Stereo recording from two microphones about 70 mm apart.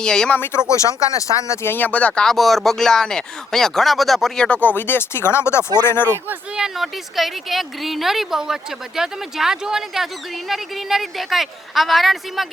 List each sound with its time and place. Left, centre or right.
0.0 s speech: centre
0.3 s speech: left
0.7 s speech: left
1.6 s speech: left
2.2 s speech: centre
4.4 s speech: centre
6.6 s speech: centre